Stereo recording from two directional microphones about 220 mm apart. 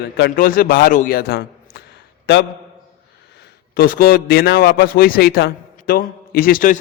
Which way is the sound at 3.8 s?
40° left (ahead or behind).